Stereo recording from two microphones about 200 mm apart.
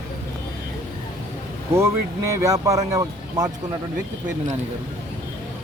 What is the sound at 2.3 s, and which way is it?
Speech, 15° right (ahead or behind).